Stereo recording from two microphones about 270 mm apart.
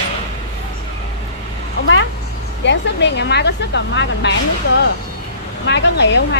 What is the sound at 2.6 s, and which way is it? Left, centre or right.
A woman's voice, left.